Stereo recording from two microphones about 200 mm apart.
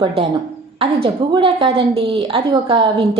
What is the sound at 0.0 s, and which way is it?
A woman's voice, 30° right (ahead or behind).